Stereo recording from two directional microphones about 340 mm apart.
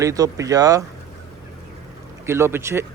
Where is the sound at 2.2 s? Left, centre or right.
Centre.